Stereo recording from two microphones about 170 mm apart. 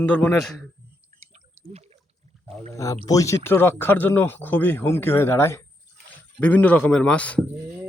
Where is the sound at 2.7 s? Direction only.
20° left (ahead or behind).